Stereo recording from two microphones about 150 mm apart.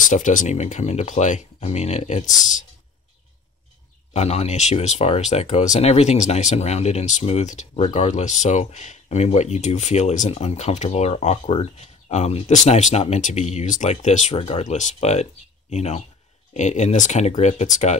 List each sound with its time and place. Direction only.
0.0 s speech: 60° left (ahead or behind)
4.1 s speech: 45° left (ahead or behind)